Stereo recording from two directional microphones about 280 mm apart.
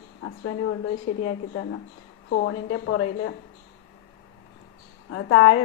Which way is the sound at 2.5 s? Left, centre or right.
Left.